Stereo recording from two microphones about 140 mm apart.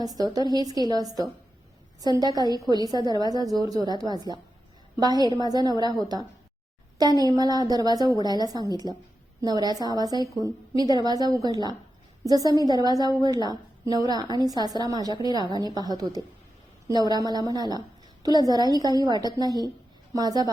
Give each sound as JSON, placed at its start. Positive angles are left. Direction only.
{"t": 0.0, "sound": "a woman's voice", "side_deg": -25}